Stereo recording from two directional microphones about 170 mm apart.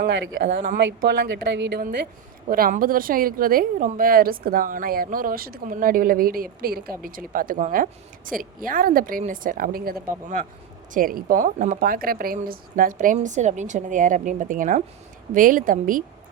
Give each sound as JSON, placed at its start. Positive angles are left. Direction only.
{"t": 0.0, "sound": "speech", "side_deg": -90}
{"t": 1.8, "sound": "speech", "side_deg": -70}
{"t": 2.5, "sound": "a woman's voice", "side_deg": -55}
{"t": 10.9, "sound": "speech", "side_deg": -55}